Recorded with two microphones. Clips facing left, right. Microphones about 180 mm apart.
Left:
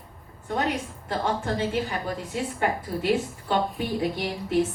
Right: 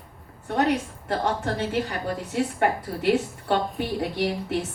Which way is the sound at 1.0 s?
65° right (ahead or behind).